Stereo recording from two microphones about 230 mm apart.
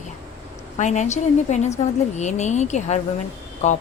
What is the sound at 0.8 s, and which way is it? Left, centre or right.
A woman's voice, left.